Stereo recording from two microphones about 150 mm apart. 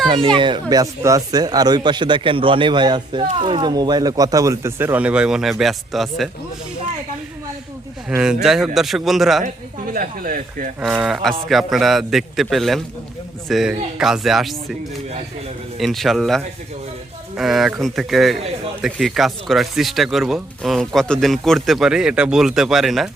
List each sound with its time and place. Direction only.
0.3 s speech: 30° right (ahead or behind); by 6.3 s centre (ahead or behind)
8.2 s speech: 5° right (ahead or behind)
9.9 s speech: 70° right (ahead or behind)
10.8 s speech: 5° right (ahead or behind)
15.8 s speech: centre (ahead or behind)